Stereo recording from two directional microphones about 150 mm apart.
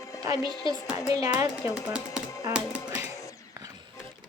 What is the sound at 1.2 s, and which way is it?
Speech, 20° right (ahead or behind).